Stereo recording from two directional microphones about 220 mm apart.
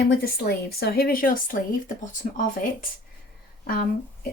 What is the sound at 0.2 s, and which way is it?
A woman's voice, 45° left (ahead or behind).